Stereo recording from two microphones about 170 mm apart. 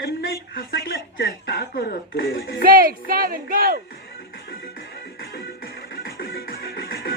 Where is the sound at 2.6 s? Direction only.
60° right (ahead or behind).